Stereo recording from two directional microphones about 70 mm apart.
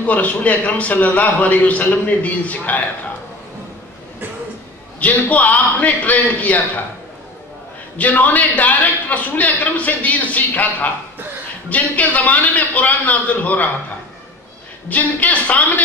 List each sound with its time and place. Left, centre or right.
0.0 s a man's voice: left
5.0 s a man's voice: left
8.0 s a man's voice: left
14.9 s a man's voice: left